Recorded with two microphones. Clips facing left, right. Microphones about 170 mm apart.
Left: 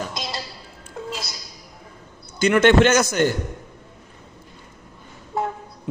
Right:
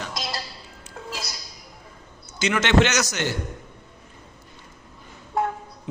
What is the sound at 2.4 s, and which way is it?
Speech, 55° left (ahead or behind).